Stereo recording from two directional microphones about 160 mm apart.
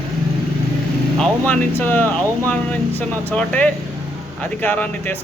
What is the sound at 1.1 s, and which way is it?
A man's voice, 5° left (ahead or behind).